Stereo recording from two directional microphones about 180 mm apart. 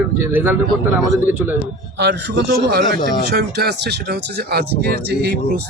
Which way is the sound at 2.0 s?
70° right (ahead or behind).